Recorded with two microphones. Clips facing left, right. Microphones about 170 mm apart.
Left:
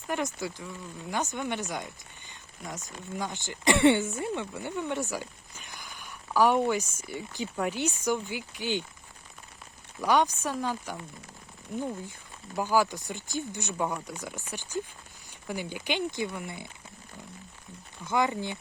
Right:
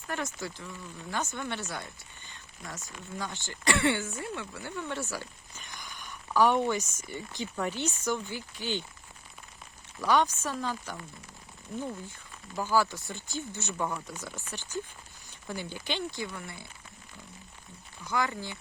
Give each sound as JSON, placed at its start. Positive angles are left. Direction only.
{"t": 0.1, "sound": "speech", "side_deg": 15}
{"t": 10.0, "sound": "speech", "side_deg": 15}
{"t": 18.0, "sound": "speech", "side_deg": 20}